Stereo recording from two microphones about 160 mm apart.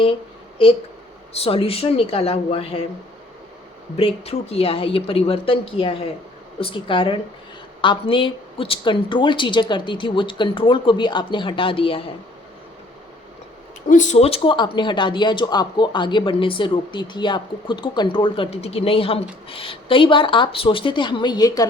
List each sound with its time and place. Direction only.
1.3 s a woman's voice: 35° left (ahead or behind)
3.9 s a woman's voice: 40° left (ahead or behind)
13.8 s a woman's voice: 50° left (ahead or behind); by 21.7 s 25° left (ahead or behind)